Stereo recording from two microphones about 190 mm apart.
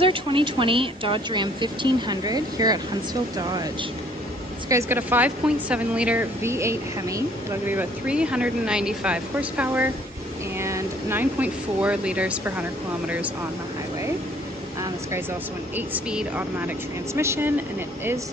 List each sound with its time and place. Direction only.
0.0 s speech: 25° right (ahead or behind)
4.6 s speech: 15° right (ahead or behind)
15.7 s speech: 5° right (ahead or behind)